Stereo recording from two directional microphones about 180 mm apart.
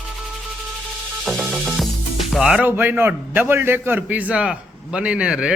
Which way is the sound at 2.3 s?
5° right (ahead or behind).